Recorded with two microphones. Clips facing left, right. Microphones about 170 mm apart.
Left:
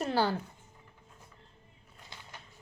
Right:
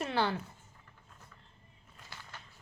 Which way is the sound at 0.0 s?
35° left (ahead or behind).